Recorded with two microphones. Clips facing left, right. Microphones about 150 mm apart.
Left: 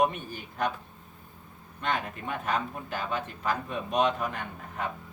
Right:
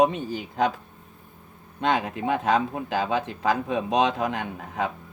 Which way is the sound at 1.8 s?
90° right.